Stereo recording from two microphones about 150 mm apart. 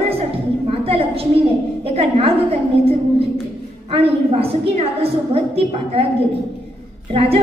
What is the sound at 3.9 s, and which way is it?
A woman's voice, 40° right (ahead or behind).